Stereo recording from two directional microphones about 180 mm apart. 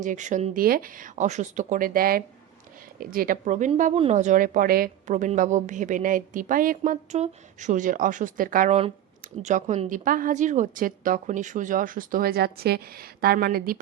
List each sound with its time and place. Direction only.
0.0 s a woman's voice: 45° right (ahead or behind)